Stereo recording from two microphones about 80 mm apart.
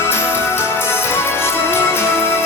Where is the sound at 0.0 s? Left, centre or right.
Left.